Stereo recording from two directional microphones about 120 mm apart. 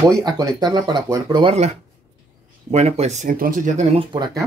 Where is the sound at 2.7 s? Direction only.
65° right (ahead or behind); by 3.9 s 90° right.